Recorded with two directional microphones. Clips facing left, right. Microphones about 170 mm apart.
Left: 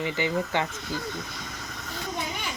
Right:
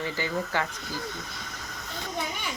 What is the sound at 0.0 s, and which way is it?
Speech, 20° left (ahead or behind).